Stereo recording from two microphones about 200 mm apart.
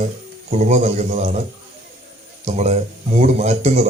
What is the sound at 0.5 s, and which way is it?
Speech, 35° right (ahead or behind).